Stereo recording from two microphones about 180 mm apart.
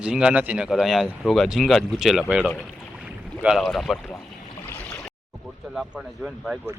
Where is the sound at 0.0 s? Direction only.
5° right (ahead or behind).